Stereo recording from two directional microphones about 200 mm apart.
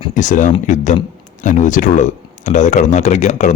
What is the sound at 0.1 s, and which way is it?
Speech, 40° left (ahead or behind).